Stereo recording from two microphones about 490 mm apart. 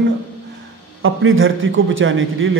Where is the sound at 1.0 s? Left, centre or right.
Right.